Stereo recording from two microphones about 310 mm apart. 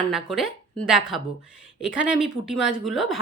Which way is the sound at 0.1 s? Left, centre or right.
Centre.